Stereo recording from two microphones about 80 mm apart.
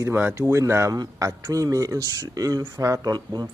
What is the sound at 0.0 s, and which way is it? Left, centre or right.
Speech, right.